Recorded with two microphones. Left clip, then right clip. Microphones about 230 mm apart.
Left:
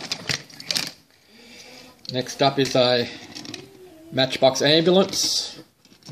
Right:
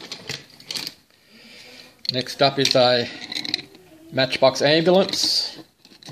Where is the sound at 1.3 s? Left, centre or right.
Centre.